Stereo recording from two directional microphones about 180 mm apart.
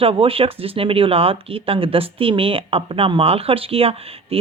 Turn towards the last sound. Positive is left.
turn(degrees=-30)  # may be behind; listen again after turning